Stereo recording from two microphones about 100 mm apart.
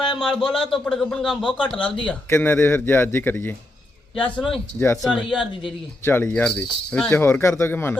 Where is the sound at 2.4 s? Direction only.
20° left (ahead or behind).